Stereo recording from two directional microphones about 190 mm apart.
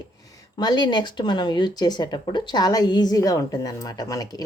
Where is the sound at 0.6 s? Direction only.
20° left (ahead or behind).